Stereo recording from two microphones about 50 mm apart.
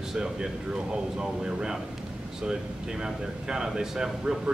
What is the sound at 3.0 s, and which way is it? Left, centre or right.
A man's voice, centre.